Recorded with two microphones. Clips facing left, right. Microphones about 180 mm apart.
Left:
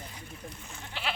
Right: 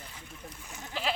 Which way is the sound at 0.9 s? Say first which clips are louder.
Right 3 dB; 40° right (ahead or behind).